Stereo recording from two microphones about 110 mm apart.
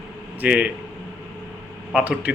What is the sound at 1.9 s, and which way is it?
Speech, 10° right (ahead or behind).